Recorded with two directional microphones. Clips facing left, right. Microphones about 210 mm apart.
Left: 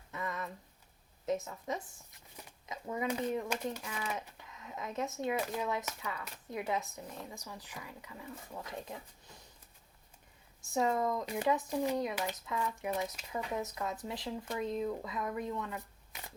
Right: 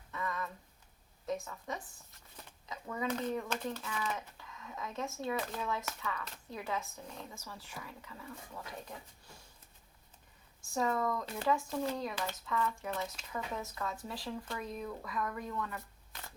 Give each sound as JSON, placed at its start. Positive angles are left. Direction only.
{"t": 0.1, "sound": "a sound", "side_deg": 20}
{"t": 1.2, "sound": "a child's voice", "side_deg": 20}
{"t": 10.6, "sound": "speech", "side_deg": 20}